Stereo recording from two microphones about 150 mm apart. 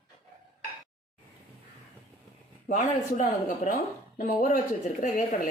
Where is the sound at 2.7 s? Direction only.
55° left (ahead or behind).